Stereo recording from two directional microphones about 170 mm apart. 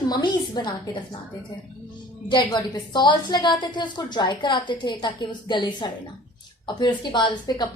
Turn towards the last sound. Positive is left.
turn(degrees=25)  # may be behind; listen again after turning